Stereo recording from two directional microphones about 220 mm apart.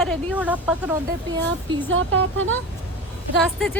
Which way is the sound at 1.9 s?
60° right (ahead or behind).